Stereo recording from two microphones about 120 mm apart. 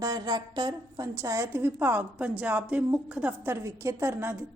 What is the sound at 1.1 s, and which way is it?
A woman's voice, 25° right (ahead or behind).